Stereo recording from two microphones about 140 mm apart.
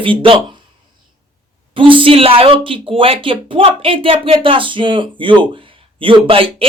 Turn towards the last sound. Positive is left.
turn(degrees=-40)  # may be behind; listen again after turning